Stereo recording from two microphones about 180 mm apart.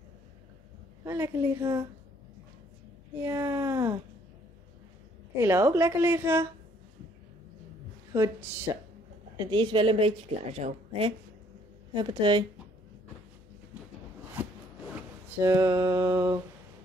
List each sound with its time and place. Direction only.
1.0 s a woman's voice: 15° right (ahead or behind)
3.2 s a woman's voice: 15° right (ahead or behind)
5.4 s a woman's voice: 15° right (ahead or behind)
8.1 s a woman's voice: 15° right (ahead or behind)
9.4 s a woman's voice: 25° right (ahead or behind)
15.4 s a woman's voice: 20° right (ahead or behind)